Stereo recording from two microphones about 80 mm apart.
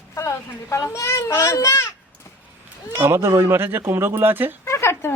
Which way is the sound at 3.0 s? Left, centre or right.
Right.